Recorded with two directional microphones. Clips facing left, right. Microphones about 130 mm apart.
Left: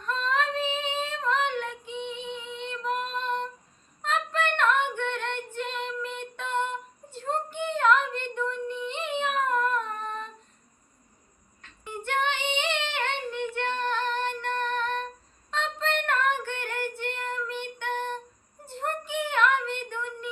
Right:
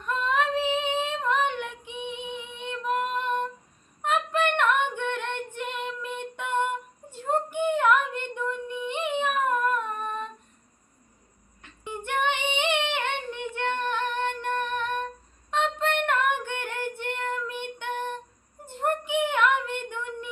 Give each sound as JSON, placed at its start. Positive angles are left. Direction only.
{"t": 0.0, "sound": "female singing", "side_deg": -15}
{"t": 3.2, "sound": "humming", "side_deg": -15}
{"t": 4.0, "sound": "female singing", "side_deg": -15}
{"t": 11.6, "sound": "female singing", "side_deg": -15}
{"t": 18.6, "sound": "a sound", "side_deg": -15}